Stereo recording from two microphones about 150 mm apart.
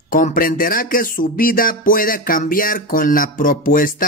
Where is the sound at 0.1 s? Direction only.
65° left (ahead or behind).